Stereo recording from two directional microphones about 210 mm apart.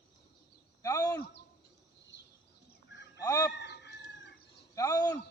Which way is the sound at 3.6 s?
50° left (ahead or behind).